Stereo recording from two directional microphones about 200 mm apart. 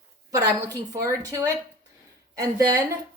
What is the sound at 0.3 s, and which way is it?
A woman's voice, 15° right (ahead or behind).